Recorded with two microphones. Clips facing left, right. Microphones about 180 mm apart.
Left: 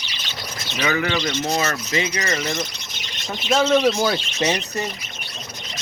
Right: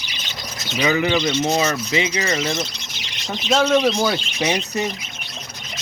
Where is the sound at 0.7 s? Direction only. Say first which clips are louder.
Right 4 dB; 20° right (ahead or behind).